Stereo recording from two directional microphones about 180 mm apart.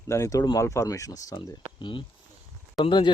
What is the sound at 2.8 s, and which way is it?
Speech, 25° left (ahead or behind).